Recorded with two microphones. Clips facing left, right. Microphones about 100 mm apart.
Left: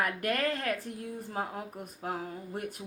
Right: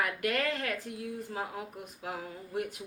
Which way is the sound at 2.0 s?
40° left (ahead or behind).